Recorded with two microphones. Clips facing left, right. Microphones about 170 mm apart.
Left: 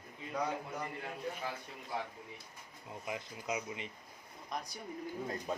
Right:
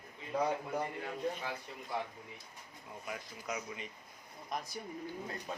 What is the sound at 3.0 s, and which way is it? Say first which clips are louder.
Speech: left 2 dB; 20° left (ahead or behind).